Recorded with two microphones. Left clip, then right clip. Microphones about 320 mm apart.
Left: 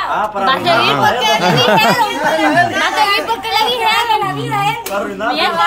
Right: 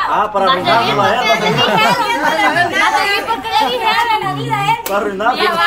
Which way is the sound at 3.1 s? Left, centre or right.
Left.